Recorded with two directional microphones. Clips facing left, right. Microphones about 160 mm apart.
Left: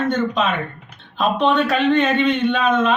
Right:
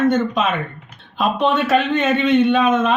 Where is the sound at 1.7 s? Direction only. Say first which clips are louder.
Even; 5° right (ahead or behind).